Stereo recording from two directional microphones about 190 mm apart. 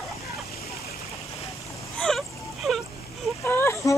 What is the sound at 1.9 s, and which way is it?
Whimper, centre (ahead or behind).